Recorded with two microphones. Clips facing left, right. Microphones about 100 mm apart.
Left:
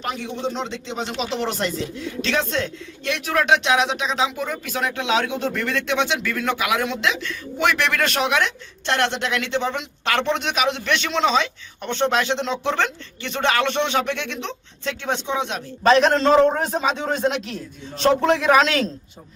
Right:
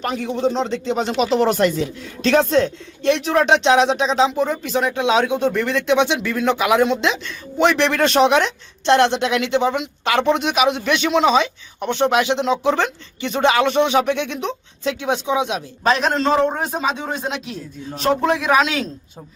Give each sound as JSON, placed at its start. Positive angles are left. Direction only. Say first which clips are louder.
{"t": 0.0, "sound": "a man's voice", "louder": "right 6 dB", "side_deg": -40}